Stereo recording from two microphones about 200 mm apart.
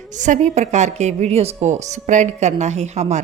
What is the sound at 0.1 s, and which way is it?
A woman's voice, 40° right (ahead or behind).